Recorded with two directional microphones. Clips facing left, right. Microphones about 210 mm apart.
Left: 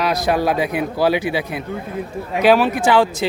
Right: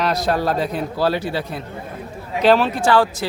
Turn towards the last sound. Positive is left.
turn(degrees=20)  # may be behind; listen again after turning